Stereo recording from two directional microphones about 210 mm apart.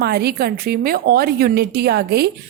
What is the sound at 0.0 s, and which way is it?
A woman's voice, 50° right (ahead or behind).